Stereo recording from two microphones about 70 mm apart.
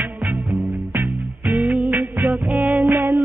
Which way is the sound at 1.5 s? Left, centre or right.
Right.